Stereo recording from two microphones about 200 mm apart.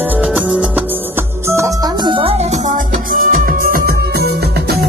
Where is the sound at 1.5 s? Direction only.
15° right (ahead or behind).